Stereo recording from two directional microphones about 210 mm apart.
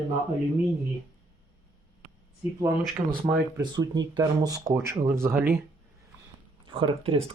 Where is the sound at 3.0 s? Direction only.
20° right (ahead or behind).